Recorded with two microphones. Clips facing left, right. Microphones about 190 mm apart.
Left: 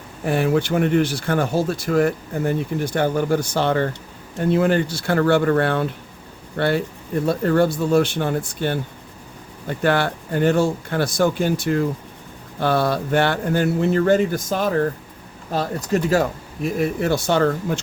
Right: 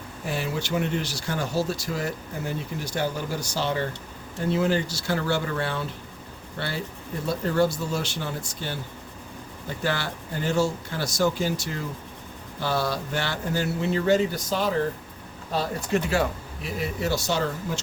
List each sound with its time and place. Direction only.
0.3 s speech: 55° left (ahead or behind)
15.5 s speech: 40° left (ahead or behind)
16.6 s speech: 50° left (ahead or behind)